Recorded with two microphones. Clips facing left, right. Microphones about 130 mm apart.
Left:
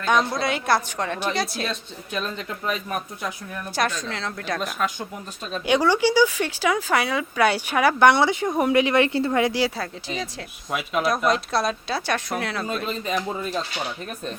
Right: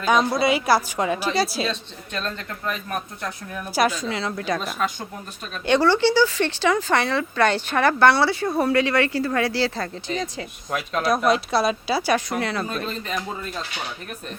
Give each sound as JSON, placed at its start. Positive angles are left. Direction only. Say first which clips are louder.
{"t": 0.0, "sound": "a woman's voice", "louder": "right 2 dB", "side_deg": -5}
{"t": 3.6, "sound": "a woman's voice", "louder": "right 4 dB", "side_deg": -5}
{"t": 5.6, "sound": "speech", "louder": "right 2 dB", "side_deg": 10}
{"t": 12.9, "sound": "speech", "louder": "left 3 dB", "side_deg": 15}